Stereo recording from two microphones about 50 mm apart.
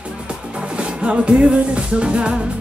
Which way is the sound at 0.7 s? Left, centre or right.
Right.